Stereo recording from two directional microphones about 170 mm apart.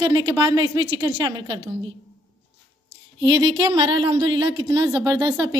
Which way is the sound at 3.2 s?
25° right (ahead or behind).